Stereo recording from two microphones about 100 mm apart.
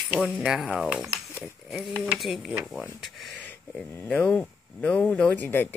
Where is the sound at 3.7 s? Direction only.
10° left (ahead or behind).